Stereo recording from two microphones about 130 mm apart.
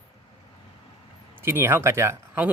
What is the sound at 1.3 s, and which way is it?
Speech, 20° right (ahead or behind).